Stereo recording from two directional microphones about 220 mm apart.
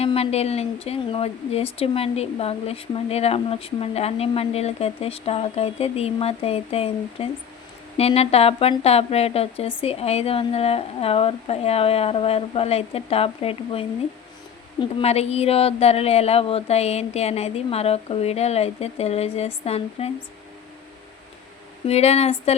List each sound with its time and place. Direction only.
0.0 s a woman's voice: 25° left (ahead or behind)
21.8 s a woman's voice: 30° left (ahead or behind)